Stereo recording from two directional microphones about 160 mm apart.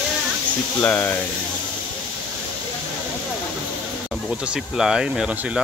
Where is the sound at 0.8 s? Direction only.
10° left (ahead or behind).